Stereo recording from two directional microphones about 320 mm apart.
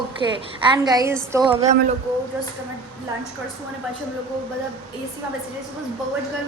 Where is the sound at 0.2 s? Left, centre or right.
Centre.